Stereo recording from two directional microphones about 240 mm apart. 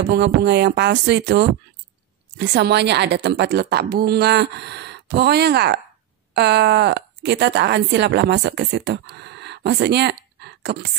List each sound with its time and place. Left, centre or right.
0.1 s a woman's voice: right